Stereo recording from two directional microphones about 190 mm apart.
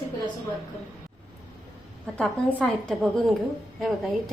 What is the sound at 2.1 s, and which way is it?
A woman's voice, 5° left (ahead or behind).